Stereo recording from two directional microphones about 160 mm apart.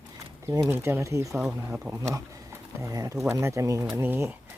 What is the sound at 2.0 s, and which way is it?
Speech, 20° right (ahead or behind).